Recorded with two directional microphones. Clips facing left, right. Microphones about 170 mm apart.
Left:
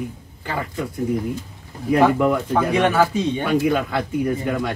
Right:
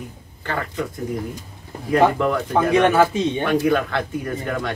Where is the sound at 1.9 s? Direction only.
10° left (ahead or behind).